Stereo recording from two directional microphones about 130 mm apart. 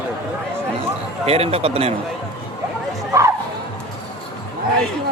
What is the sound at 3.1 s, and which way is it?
Speech, 25° right (ahead or behind).